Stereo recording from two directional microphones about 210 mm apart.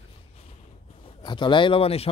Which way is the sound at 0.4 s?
30° left (ahead or behind).